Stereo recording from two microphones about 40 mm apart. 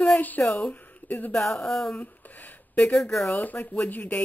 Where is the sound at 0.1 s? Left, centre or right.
Left.